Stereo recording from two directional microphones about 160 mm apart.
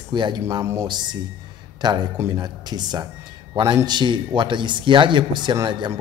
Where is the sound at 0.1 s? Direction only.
30° right (ahead or behind).